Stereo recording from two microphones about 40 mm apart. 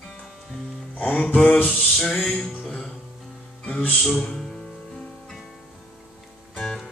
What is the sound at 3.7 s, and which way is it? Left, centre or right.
Music, left.